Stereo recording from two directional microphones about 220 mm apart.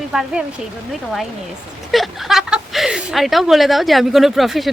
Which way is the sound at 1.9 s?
Centre (ahead or behind).